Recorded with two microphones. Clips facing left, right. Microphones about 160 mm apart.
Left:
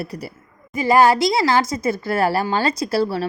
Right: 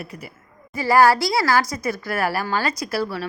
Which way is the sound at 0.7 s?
20° left (ahead or behind).